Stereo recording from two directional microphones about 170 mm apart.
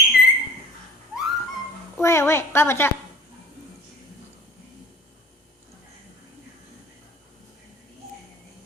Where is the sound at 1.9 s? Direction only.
15° left (ahead or behind).